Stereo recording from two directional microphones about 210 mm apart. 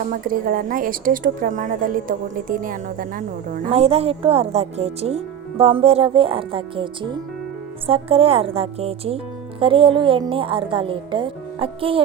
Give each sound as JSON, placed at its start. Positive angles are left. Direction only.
{"t": 0.0, "sound": "a woman's voice", "side_deg": -40}
{"t": 3.7, "sound": "a woman's voice", "side_deg": -30}